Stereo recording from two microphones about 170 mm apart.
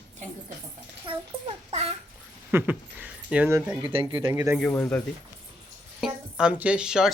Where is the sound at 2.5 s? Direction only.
10° right (ahead or behind).